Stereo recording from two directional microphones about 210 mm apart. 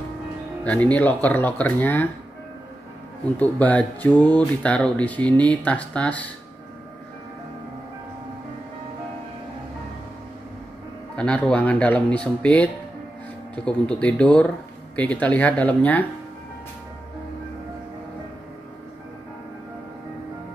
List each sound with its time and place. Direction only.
0.7 s speech: 5° left (ahead or behind)
3.3 s speech: 5° left (ahead or behind)
11.1 s speech: 5° left (ahead or behind)